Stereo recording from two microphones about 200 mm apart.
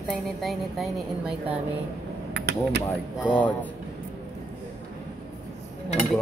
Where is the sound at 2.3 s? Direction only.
55° right (ahead or behind).